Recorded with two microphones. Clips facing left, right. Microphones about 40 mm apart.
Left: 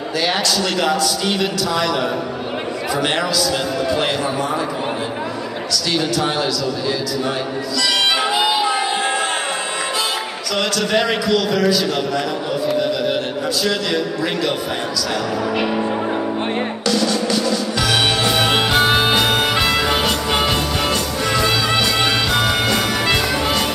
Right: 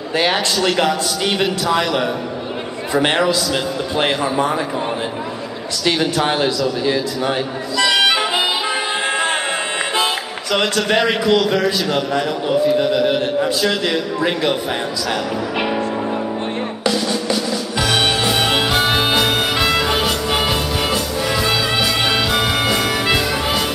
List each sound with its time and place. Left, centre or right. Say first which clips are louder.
0.3 s a man's voice: right 1 dB; centre
3.9 s a man's voice: right 5 dB; right
5.9 s a man's voice: right 3 dB; right
7.9 s music: even; centre
11.2 s a man's voice: right 1 dB; centre
15.5 s speech: right 1 dB; centre
16.8 s music: even; centre